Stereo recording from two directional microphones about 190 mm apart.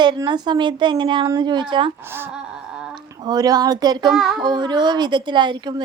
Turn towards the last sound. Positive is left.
turn(degrees=-25)  # may be behind; listen again after turning